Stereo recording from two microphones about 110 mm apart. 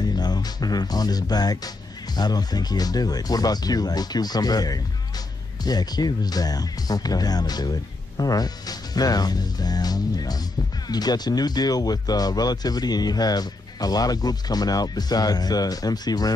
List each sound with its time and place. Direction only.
0.0 s speech: 40° left (ahead or behind)